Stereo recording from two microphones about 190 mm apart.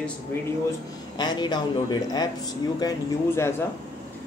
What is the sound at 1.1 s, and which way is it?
A man's voice, 20° left (ahead or behind).